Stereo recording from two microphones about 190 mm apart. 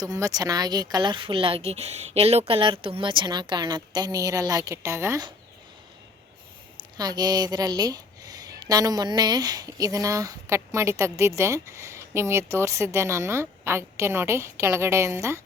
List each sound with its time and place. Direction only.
0.0 s speech: 20° right (ahead or behind)
6.9 s speech: 20° right (ahead or behind)